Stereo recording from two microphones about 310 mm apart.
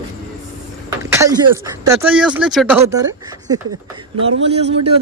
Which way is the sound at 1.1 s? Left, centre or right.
Centre.